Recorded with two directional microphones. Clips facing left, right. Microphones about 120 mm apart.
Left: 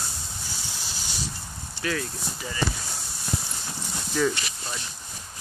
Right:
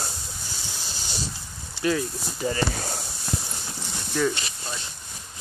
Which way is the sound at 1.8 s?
20° right (ahead or behind).